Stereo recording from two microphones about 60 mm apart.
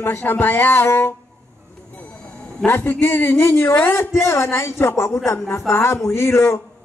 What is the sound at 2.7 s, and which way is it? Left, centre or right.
A man's voice, left.